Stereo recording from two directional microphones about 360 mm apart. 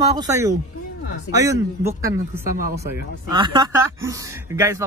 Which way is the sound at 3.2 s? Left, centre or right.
Centre.